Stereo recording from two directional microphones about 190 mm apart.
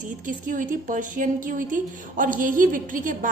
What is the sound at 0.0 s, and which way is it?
A woman's voice, 45° right (ahead or behind).